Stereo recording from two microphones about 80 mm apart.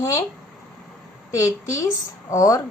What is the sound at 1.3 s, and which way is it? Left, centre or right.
A woman's voice, left.